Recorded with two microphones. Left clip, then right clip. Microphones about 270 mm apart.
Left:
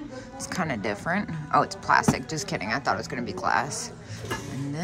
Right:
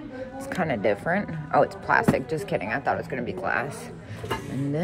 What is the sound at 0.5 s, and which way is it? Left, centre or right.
Speech, centre.